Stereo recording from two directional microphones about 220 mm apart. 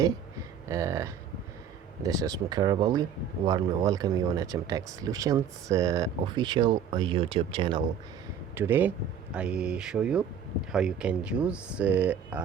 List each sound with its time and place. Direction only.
0.7 s speech: 15° right (ahead or behind)
8.5 s speech: 10° right (ahead or behind)